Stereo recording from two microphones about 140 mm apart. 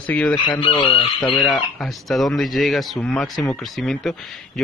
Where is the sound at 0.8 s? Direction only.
45° left (ahead or behind).